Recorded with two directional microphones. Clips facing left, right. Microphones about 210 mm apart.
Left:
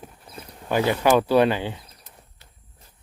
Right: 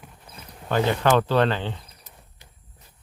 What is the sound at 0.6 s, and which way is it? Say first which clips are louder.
Speech: left 1 dB; 10° left (ahead or behind).